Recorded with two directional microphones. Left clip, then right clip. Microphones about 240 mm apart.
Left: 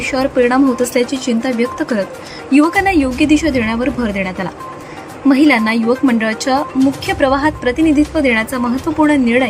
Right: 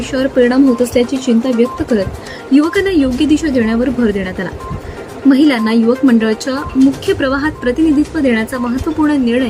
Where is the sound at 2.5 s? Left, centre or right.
Left.